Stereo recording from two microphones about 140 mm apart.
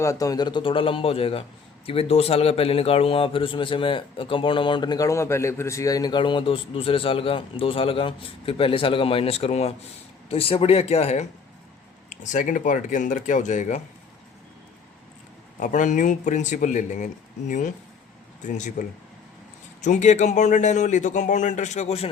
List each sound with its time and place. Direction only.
0.0 s a man's voice: 25° left (ahead or behind); by 11.3 s 50° left (ahead or behind)
12.0 s a man's voice: 60° left (ahead or behind)
15.6 s a man's voice: 65° left (ahead or behind)